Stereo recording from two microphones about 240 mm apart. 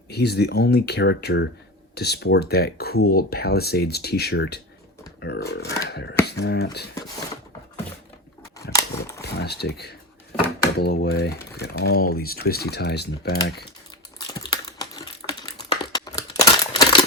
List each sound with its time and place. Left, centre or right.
0.1 s speech: left
8.7 s a sound: centre
9.4 s speech: left
14.3 s typing: centre